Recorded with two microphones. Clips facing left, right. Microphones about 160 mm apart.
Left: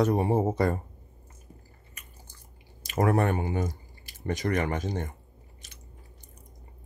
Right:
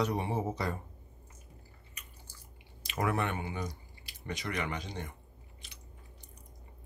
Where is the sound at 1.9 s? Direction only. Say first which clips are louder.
Left 4 dB; 50° left (ahead or behind).